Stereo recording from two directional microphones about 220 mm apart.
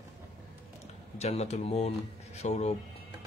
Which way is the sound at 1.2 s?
30° left (ahead or behind).